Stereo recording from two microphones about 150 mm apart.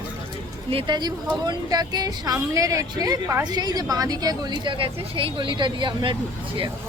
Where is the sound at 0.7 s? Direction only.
35° right (ahead or behind).